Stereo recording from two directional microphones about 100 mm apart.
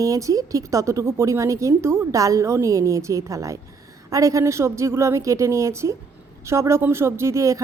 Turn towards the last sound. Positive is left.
turn(degrees=-30)  # may be behind; listen again after turning